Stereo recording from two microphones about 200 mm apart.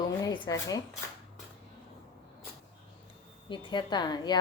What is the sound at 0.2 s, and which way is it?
Speech, 20° left (ahead or behind).